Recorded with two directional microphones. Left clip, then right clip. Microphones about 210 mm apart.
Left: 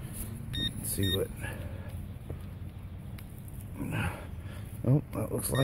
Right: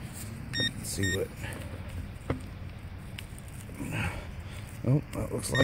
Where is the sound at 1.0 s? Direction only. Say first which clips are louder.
Right 1 dB; centre (ahead or behind).